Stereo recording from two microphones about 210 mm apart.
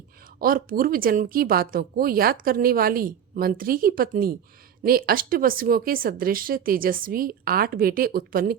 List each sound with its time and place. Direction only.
0.3 s speech: 45° right (ahead or behind)